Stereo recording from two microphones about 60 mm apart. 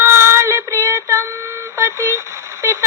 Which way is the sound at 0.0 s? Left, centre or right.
Right.